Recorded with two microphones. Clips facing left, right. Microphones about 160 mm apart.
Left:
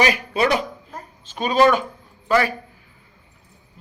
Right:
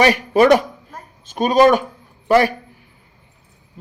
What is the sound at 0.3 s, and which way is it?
A man's voice, 45° right (ahead or behind).